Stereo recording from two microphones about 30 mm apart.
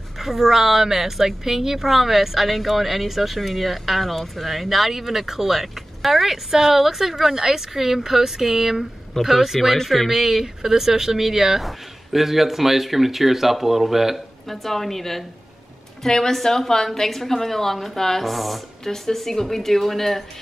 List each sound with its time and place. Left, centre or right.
0.2 s speech: centre
14.5 s a woman's voice: centre
18.3 s speech: centre
18.9 s a woman's voice: centre